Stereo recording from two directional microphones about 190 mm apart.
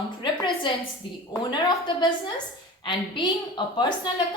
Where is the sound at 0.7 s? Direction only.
25° left (ahead or behind).